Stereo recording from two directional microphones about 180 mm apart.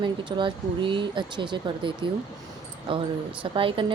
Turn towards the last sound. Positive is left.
turn(degrees=-30)  # may be behind; listen again after turning